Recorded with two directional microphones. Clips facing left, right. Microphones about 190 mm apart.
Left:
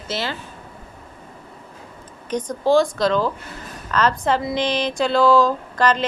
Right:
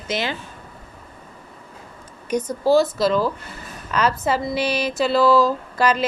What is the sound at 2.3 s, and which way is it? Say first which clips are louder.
Speech: right 1 dB; 10° right (ahead or behind).